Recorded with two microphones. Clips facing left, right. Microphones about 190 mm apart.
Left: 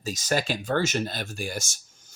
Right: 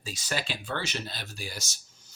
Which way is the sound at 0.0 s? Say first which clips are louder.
Left 7 dB; 45° left (ahead or behind).